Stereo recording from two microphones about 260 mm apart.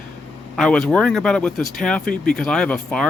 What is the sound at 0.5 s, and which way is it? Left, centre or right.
Speech, centre.